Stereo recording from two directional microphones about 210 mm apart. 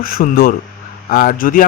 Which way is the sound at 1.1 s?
40° left (ahead or behind).